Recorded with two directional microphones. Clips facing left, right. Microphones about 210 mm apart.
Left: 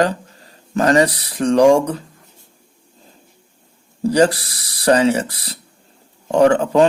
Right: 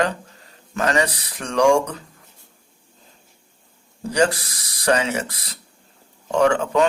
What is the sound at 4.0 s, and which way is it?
Speech, 35° left (ahead or behind).